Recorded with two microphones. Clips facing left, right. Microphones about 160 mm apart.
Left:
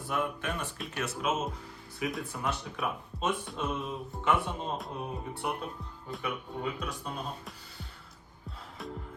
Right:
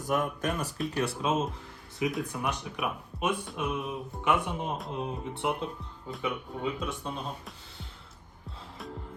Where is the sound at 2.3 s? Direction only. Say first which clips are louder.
Right 1 dB; 15° right (ahead or behind).